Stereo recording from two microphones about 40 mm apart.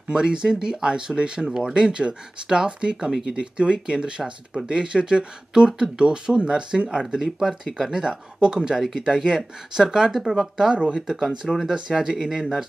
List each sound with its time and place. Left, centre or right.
0.1 s speech: centre
11.1 s speech: centre
11.6 s speech: centre